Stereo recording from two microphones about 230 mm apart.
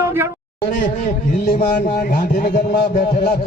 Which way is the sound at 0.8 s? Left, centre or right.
Left.